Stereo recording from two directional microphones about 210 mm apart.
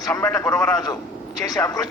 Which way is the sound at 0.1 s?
10° left (ahead or behind).